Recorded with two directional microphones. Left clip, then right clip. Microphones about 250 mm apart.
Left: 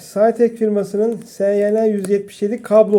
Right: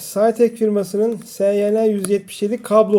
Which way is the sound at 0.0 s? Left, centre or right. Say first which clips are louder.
Left 1 dB; centre.